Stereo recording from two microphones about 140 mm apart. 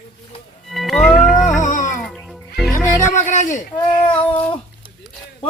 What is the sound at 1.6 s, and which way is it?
Music, 65° left (ahead or behind).